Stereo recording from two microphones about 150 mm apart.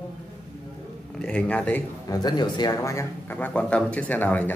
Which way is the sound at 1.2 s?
10° left (ahead or behind).